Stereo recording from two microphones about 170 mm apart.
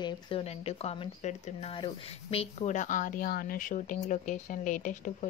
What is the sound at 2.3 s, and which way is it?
A woman's voice, 45° left (ahead or behind).